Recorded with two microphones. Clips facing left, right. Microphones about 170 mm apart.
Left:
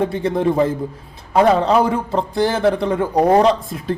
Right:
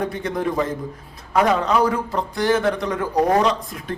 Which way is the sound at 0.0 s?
30° left (ahead or behind).